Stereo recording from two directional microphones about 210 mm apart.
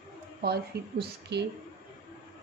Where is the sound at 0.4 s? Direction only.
50° right (ahead or behind).